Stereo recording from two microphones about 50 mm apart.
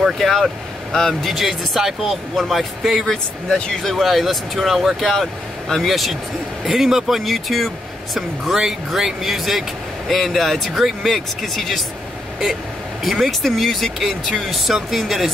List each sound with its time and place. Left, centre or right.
0.0 s speech: centre
1.3 s speech: centre
3.4 s speech: centre
3.8 s speech: centre
13.0 s speech: centre